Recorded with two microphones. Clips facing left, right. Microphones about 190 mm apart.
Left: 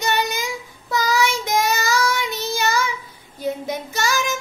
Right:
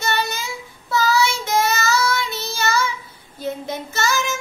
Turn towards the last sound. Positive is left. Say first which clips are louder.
# even
turn(degrees=15)  # may be behind; listen again after turning